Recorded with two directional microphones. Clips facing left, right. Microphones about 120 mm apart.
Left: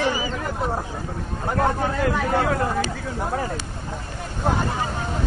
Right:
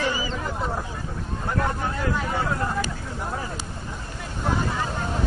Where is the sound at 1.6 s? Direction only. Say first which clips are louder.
Left 6 dB; 65° left (ahead or behind).